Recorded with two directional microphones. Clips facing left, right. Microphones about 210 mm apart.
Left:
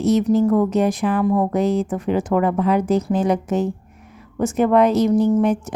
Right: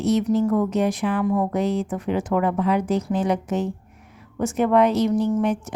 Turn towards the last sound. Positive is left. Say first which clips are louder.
# left 4 dB
turn(degrees=40)  # may be behind; listen again after turning